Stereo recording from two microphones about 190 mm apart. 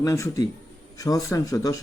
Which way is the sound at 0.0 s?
15° left (ahead or behind).